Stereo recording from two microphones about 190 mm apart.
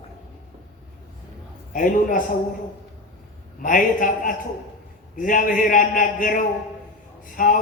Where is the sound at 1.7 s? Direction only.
45° left (ahead or behind).